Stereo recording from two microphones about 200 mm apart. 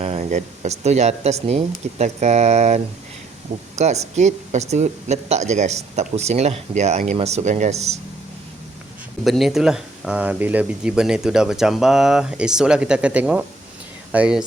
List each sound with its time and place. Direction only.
0.0 s speech: 35° right (ahead or behind)
9.2 s speech: centre (ahead or behind)